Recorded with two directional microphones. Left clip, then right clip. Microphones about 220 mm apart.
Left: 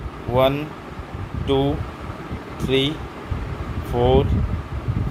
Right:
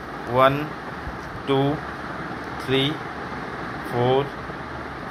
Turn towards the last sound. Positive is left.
turn(degrees=20)  # may be behind; listen again after turning